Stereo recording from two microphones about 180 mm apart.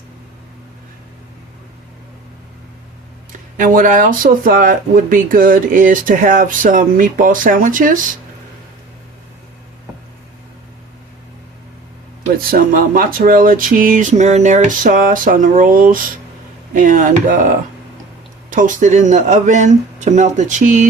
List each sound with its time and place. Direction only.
3.6 s speech: 50° right (ahead or behind)
12.4 s speech: 50° right (ahead or behind)